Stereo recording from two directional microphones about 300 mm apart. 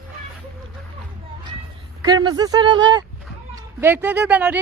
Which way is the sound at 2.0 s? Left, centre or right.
Centre.